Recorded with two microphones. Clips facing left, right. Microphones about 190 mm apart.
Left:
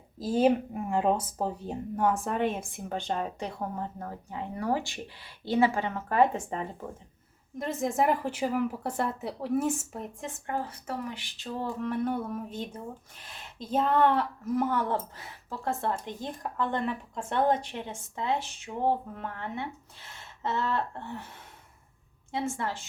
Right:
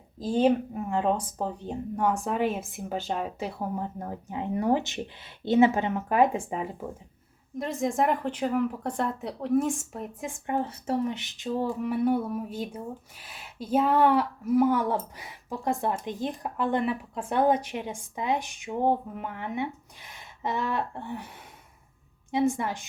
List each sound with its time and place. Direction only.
0.3 s a woman's voice: 5° left (ahead or behind)
10.4 s speech: 25° right (ahead or behind)
22.3 s speech: 15° right (ahead or behind)